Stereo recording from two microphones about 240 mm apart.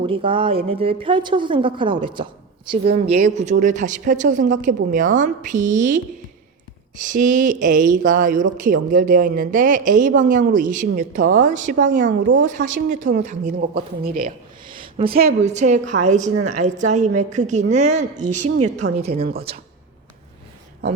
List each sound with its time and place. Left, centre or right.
0.0 s a woman's voice: right
7.0 s speech: right
14.8 s a sound: right
15.3 s a woman's voice: right